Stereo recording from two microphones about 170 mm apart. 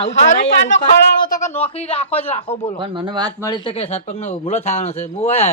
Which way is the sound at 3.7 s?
40° left (ahead or behind).